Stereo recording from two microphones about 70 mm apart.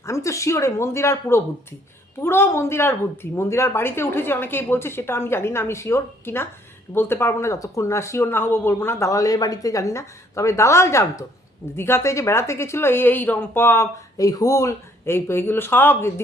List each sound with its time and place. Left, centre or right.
0.0 s speech: left
14.2 s speech: left